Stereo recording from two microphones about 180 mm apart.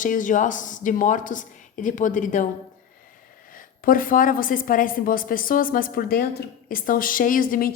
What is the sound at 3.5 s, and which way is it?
A woman's voice, 50° left (ahead or behind).